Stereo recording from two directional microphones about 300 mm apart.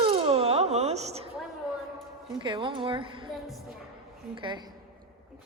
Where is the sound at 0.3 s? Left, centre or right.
Centre.